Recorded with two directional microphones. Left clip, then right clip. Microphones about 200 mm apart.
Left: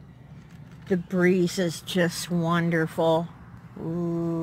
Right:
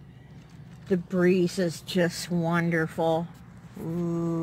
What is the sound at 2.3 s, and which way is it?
Speech, 40° left (ahead or behind).